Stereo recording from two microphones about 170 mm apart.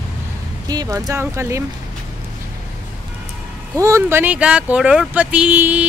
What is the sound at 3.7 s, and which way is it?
Speech, 15° right (ahead or behind).